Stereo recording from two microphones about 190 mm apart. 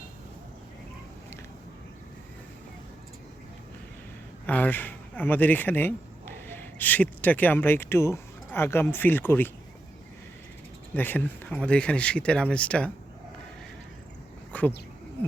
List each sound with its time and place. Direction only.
4.4 s speech: 10° left (ahead or behind)
10.9 s speech: 10° left (ahead or behind)
14.5 s a sound: 5° left (ahead or behind)